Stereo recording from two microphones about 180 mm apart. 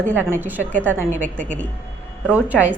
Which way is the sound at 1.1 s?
45° right (ahead or behind).